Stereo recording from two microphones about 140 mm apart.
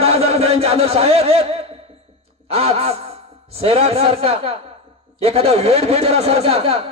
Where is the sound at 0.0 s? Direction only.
45° right (ahead or behind).